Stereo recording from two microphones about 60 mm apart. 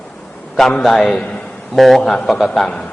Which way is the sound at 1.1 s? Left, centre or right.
Centre.